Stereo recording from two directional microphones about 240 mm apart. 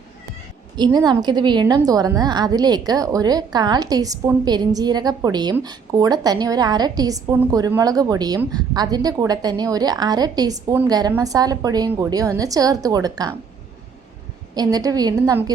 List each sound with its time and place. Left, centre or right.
0.8 s a woman's voice: centre
14.5 s a woman's voice: centre